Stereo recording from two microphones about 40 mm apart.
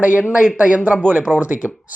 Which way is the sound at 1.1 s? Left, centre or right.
Right.